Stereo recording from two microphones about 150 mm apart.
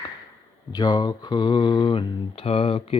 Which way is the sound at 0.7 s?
30° left (ahead or behind).